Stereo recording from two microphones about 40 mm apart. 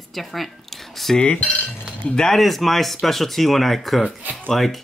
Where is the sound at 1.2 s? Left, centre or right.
Left.